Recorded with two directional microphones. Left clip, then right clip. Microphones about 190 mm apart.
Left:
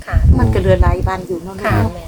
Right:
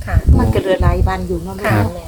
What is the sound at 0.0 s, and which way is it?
Speech, 5° left (ahead or behind).